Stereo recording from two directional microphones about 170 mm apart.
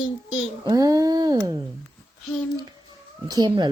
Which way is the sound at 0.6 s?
20° right (ahead or behind).